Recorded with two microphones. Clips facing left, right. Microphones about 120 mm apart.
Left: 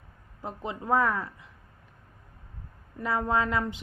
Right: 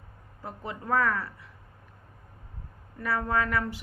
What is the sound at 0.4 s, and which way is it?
Speech, 20° left (ahead or behind).